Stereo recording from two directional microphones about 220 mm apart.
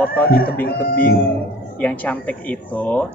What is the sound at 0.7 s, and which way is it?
Speech, 40° left (ahead or behind).